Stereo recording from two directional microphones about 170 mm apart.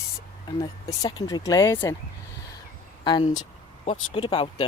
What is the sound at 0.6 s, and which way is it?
Speech, 20° left (ahead or behind).